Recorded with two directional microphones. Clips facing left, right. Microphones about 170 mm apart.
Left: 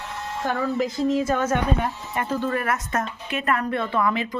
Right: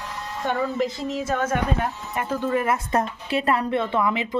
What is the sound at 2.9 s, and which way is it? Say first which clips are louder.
A woman's voice: right 4 dB; 30° right (ahead or behind).